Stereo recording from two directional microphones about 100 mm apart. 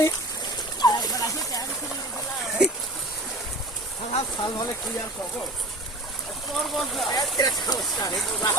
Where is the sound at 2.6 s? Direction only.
10° right (ahead or behind).